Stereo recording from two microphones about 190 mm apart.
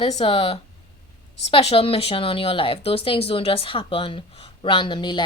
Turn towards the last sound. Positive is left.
turn(degrees=25)  # may be behind; listen again after turning